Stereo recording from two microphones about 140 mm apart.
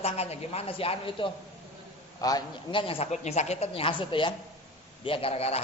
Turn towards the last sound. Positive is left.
turn(degrees=45)  # may be behind; listen again after turning